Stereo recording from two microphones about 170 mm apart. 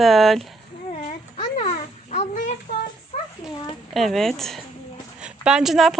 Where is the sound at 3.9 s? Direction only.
Centre (ahead or behind).